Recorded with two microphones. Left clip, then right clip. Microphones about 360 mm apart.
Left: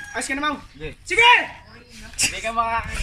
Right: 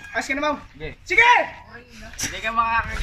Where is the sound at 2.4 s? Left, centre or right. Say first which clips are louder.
Right 4 dB; centre.